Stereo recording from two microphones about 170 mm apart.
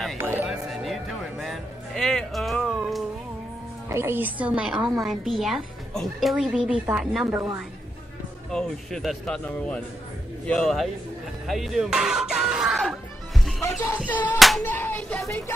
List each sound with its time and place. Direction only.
0.2 s music: 10° right (ahead or behind)
3.9 s a woman's voice: 15° right (ahead or behind)
8.5 s a woman's voice: centre (ahead or behind)
14.0 s music: 10° left (ahead or behind)
14.6 s a sound: 10° left (ahead or behind)
15.2 s music: 15° left (ahead or behind)